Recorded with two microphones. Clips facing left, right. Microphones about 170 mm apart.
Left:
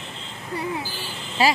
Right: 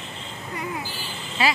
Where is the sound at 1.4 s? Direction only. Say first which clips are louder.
Left 3 dB; 40° left (ahead or behind).